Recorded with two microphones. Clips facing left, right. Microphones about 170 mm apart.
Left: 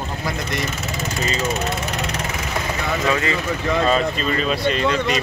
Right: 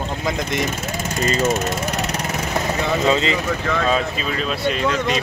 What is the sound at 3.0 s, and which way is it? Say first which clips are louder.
Speech: right 2 dB; 20° right (ahead or behind).